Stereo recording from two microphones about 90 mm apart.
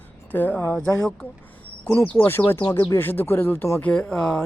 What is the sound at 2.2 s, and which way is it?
Speech, 25° left (ahead or behind).